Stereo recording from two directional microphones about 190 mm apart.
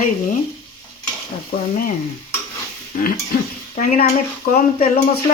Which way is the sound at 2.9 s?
45° left (ahead or behind).